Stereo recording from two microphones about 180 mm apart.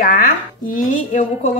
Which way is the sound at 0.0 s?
50° left (ahead or behind).